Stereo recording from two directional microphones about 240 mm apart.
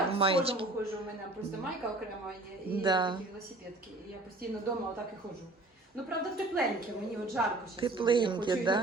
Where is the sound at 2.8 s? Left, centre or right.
Centre.